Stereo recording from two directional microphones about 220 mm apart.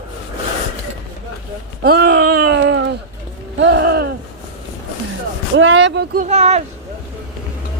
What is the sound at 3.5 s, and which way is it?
Speech, 55° right (ahead or behind).